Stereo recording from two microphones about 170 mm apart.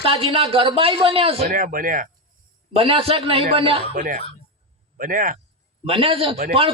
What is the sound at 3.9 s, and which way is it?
Speech, 50° right (ahead or behind).